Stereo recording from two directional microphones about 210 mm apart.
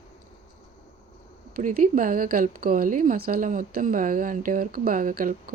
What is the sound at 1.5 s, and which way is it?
A woman's voice, 40° right (ahead or behind).